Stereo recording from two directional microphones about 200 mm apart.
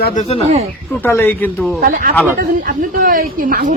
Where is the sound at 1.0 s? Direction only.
10° left (ahead or behind).